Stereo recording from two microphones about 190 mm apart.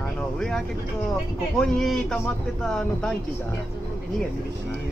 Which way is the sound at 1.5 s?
Centre (ahead or behind).